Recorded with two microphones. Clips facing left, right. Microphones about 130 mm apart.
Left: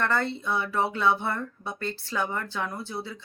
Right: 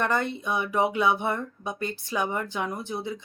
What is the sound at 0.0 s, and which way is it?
Speech, 15° right (ahead or behind).